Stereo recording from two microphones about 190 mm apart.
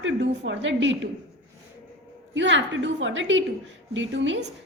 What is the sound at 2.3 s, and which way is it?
A woman's voice, 75° right (ahead or behind).